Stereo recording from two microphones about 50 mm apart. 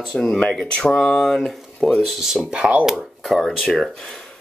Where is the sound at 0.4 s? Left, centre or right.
Centre.